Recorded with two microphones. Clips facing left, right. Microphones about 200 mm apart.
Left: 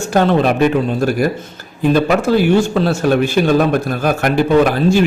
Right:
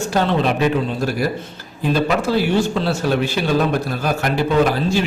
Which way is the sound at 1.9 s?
50° left (ahead or behind).